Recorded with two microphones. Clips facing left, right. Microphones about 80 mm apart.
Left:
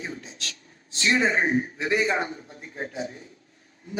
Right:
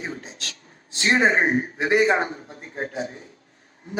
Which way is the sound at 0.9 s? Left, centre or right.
Right.